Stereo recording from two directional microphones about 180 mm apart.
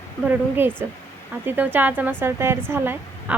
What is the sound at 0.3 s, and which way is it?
Speech, 10° right (ahead or behind).